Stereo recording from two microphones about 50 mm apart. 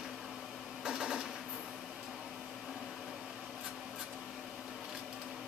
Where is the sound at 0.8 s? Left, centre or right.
Centre.